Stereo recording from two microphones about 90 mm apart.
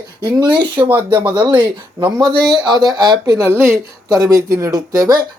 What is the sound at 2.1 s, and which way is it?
Speech, 55° right (ahead or behind).